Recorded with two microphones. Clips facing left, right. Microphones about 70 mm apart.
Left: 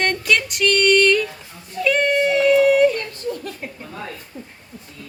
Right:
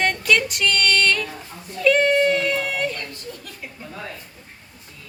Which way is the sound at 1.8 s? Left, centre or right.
Centre.